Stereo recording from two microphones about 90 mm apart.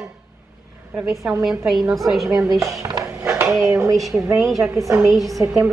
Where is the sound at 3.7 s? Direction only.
30° right (ahead or behind).